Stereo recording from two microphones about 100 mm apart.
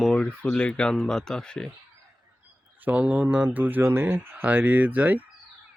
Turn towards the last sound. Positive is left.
turn(degrees=-15)  # may be behind; listen again after turning